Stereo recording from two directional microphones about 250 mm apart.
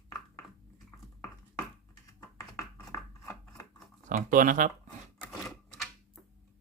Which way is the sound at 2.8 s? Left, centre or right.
Centre.